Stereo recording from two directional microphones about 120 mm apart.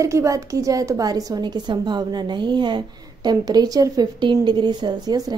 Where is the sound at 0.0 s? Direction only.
25° right (ahead or behind).